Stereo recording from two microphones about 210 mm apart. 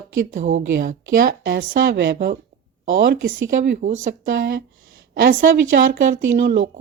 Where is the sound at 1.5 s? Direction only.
55° right (ahead or behind).